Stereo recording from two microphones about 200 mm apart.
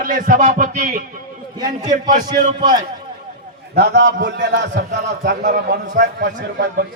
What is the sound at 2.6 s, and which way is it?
Speech, 20° right (ahead or behind).